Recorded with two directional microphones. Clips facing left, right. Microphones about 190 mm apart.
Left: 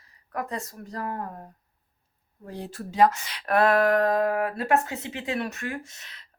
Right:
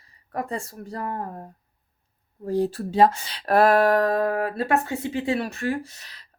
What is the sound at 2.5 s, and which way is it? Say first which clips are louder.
Speech: right 12 dB; 35° right (ahead or behind).